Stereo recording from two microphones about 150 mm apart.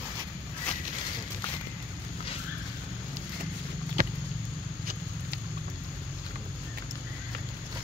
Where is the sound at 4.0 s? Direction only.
85° right.